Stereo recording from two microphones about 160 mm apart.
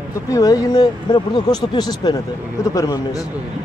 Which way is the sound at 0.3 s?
20° left (ahead or behind).